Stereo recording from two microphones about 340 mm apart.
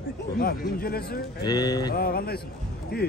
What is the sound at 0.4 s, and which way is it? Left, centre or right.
Speech, left.